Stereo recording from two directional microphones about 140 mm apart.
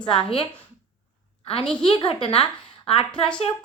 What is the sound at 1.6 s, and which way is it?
Speech, 5° left (ahead or behind).